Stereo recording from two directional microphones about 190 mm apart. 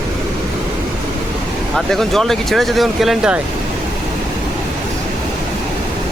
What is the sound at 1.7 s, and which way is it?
Speech, centre (ahead or behind).